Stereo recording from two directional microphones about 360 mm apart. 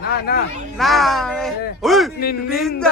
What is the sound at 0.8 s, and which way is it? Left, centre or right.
Speech, centre.